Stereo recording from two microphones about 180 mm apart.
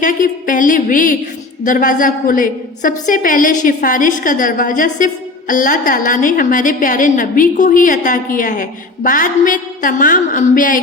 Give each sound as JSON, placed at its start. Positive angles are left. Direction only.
{"t": 0.0, "sound": "a woman's voice", "side_deg": 45}